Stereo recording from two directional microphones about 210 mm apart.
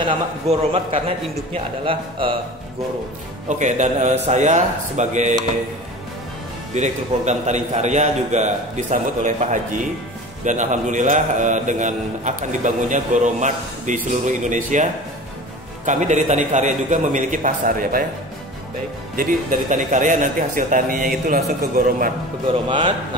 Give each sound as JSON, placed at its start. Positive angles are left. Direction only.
{"t": 0.0, "sound": "a man's voice", "side_deg": -25}
{"t": 3.4, "sound": "a man's voice", "side_deg": -35}
{"t": 6.7, "sound": "a man's voice", "side_deg": -35}
{"t": 19.7, "sound": "a man's voice", "side_deg": -35}
{"t": 22.5, "sound": "a man's voice", "side_deg": -25}